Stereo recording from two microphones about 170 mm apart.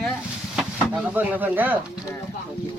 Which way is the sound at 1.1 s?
10° right (ahead or behind).